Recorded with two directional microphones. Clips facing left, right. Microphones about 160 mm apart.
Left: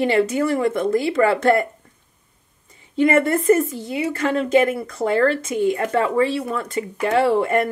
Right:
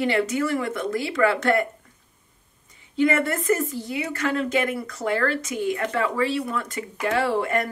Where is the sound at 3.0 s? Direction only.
30° left (ahead or behind).